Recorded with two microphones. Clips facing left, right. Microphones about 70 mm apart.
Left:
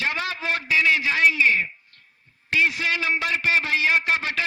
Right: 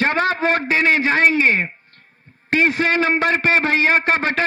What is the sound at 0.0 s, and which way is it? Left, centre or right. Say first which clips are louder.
A man's voice: right 9 dB; right.